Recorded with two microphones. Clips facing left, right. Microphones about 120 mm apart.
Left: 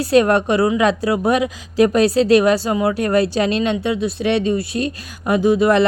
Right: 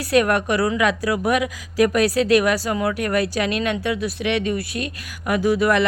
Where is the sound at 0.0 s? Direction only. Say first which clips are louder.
Left 4 dB; 25° left (ahead or behind).